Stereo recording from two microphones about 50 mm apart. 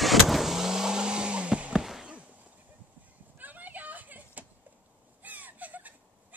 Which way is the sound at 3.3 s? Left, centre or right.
Right.